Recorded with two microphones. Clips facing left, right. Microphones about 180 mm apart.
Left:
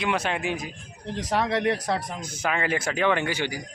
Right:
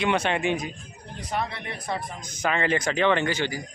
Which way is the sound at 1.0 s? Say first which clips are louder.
Left 5 dB; 90° left.